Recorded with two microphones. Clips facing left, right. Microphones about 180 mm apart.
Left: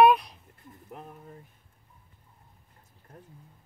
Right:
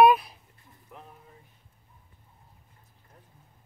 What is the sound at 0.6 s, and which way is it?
Stir, 50° left (ahead or behind).